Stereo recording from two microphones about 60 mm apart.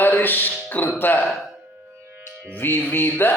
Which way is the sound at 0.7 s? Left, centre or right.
Left.